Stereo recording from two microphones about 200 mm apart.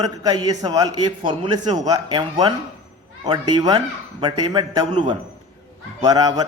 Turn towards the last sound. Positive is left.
turn(degrees=-20)  # may be behind; listen again after turning